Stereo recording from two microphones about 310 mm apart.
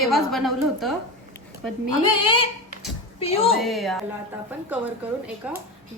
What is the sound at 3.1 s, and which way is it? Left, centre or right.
Speech, centre.